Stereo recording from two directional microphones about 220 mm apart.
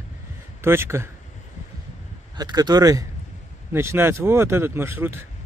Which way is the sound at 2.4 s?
20° right (ahead or behind).